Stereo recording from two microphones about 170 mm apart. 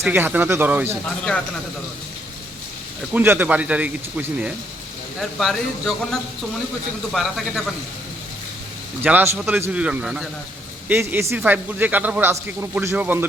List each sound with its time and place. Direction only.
0.0 s a man's voice: 10° right (ahead or behind)
3.1 s a man's voice: 10° right (ahead or behind)
9.0 s a man's voice: 10° right (ahead or behind)